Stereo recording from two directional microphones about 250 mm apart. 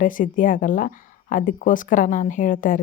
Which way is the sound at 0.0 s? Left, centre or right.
Left.